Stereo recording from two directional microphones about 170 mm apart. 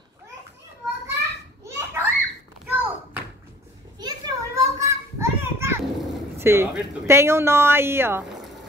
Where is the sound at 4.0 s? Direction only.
25° right (ahead or behind).